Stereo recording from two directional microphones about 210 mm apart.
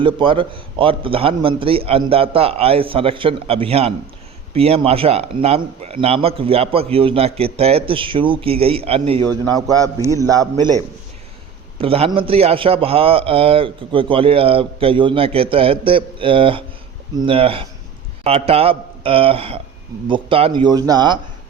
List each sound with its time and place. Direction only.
0.0 s a man's voice: 25° right (ahead or behind)
11.8 s a man's voice: 25° right (ahead or behind)